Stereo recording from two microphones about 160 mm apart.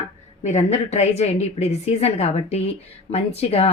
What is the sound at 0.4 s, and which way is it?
Speech, 45° left (ahead or behind).